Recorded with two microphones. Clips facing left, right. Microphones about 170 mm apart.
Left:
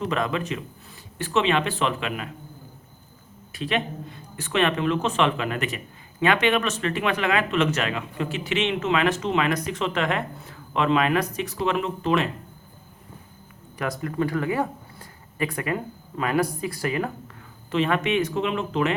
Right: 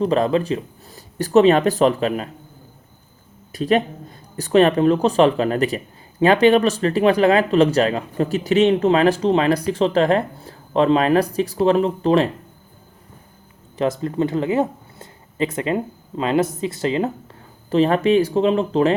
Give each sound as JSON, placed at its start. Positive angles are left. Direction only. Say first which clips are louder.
{"t": 0.0, "sound": "speech", "louder": "right 8 dB", "side_deg": -35}
{"t": 3.5, "sound": "speech", "louder": "right 8 dB", "side_deg": -40}
{"t": 13.7, "sound": "speech", "louder": "right 6 dB", "side_deg": -25}
{"t": 17.7, "sound": "speech", "louder": "right 7 dB", "side_deg": -35}